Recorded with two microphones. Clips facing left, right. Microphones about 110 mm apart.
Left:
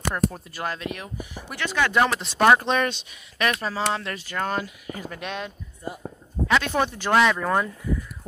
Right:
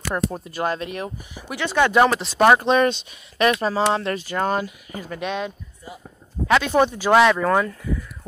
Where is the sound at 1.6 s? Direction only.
25° right (ahead or behind).